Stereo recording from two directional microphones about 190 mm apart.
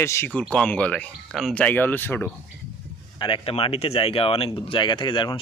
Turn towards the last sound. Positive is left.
turn(degrees=25)  # may be behind; listen again after turning